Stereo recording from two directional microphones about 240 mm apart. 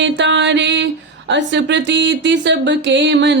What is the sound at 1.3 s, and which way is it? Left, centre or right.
Speech, right.